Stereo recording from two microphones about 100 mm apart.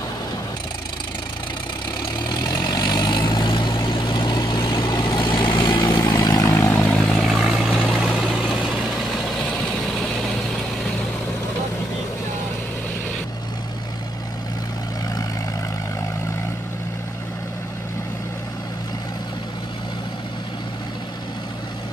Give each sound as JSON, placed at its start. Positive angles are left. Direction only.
{"t": 2.2, "sound": "vehicle", "side_deg": 45}
{"t": 5.6, "sound": "vehicle", "side_deg": 35}
{"t": 6.5, "sound": "vehicle", "side_deg": 25}
{"t": 7.2, "sound": "vehicle", "side_deg": 0}